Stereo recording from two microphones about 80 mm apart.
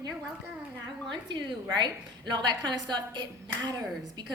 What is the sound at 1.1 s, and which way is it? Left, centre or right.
A woman's voice, right.